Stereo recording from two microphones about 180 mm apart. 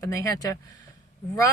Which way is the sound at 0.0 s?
20° left (ahead or behind).